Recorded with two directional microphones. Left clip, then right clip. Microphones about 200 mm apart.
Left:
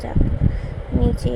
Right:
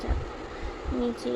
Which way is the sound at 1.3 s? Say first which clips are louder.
Left 5 dB; 15° left (ahead or behind).